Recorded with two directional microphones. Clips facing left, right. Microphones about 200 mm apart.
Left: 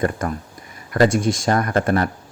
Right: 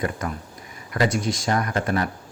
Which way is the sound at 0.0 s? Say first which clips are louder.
Left 5 dB; 50° left (ahead or behind).